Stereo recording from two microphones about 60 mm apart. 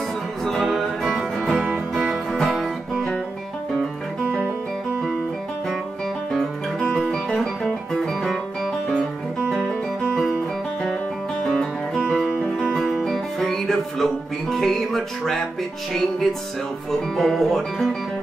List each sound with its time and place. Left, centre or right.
0.5 s music: centre
6.3 s music: centre
9.7 s music: centre
11.4 s music: centre
17.2 s speech: centre